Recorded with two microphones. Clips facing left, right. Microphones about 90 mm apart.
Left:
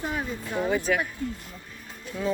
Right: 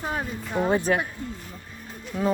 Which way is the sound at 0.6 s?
35° right (ahead or behind).